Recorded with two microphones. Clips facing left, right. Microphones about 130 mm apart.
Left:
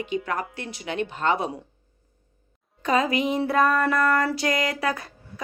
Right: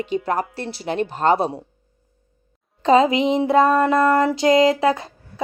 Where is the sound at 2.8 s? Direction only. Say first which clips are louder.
Right 7 dB; 25° right (ahead or behind).